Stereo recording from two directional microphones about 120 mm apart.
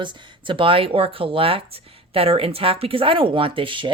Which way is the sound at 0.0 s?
45° right (ahead or behind).